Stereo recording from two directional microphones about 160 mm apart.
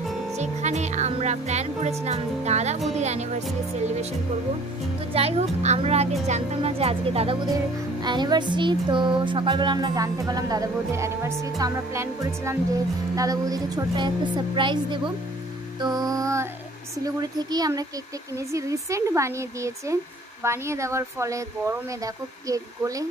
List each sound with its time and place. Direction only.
0.4 s music: 45° right (ahead or behind)
2.0 s speech: 45° right (ahead or behind)
5.1 s speech: 40° right (ahead or behind)
7.5 s music: 25° right (ahead or behind)